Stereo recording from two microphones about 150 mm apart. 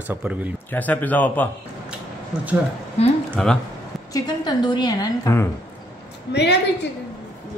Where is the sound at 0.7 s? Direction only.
10° left (ahead or behind).